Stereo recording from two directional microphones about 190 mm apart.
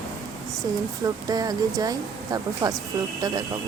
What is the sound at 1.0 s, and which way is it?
Speech, 20° right (ahead or behind).